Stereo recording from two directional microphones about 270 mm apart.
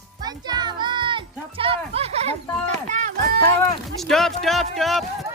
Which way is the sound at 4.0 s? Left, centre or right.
Centre.